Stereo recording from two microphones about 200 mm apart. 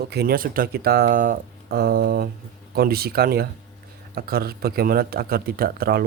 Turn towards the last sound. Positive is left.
turn(degrees=-50)  # may be behind; listen again after turning